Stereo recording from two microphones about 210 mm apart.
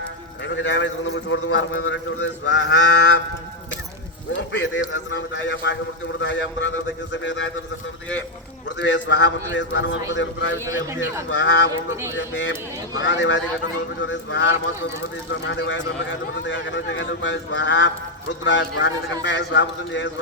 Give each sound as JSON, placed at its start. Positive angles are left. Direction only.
{"t": 0.4, "sound": "speech", "side_deg": 60}
{"t": 4.3, "sound": "speech", "side_deg": 60}
{"t": 8.8, "sound": "speech", "side_deg": 60}
{"t": 10.6, "sound": "a man's voice", "side_deg": -15}
{"t": 11.3, "sound": "speech", "side_deg": 60}
{"t": 11.9, "sound": "a man's voice", "side_deg": -10}
{"t": 12.2, "sound": "speech", "side_deg": 60}